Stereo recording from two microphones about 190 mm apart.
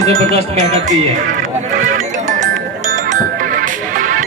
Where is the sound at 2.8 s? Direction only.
45° right (ahead or behind).